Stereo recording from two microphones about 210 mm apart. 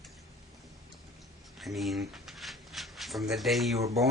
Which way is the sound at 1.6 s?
Centre (ahead or behind).